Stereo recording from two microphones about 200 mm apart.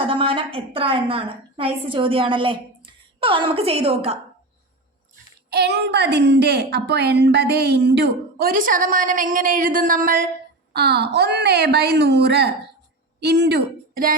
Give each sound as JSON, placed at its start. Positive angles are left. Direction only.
{"t": 0.1, "sound": "a woman's voice", "side_deg": -25}
{"t": 5.5, "sound": "a woman's voice", "side_deg": -55}
{"t": 10.7, "sound": "a woman's voice", "side_deg": -55}